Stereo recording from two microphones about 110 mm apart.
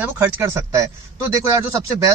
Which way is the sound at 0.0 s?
20° right (ahead or behind).